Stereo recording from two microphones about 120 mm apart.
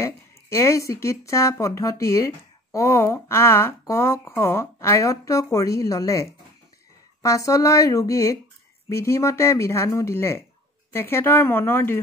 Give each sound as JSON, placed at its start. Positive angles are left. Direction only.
{"t": 0.0, "sound": "speech", "side_deg": 25}